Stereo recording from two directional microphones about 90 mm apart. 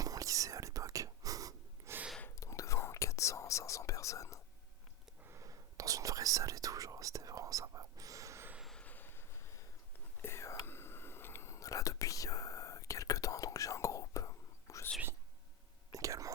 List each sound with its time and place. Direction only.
0.0 s whispering: 40° right (ahead or behind)
2.3 s whispering: 35° left (ahead or behind)
5.2 s whispering: 35° right (ahead or behind)
8.8 s a sound: 20° left (ahead or behind)
10.2 s whispering: 30° left (ahead or behind)
15.9 s whispering: 40° right (ahead or behind)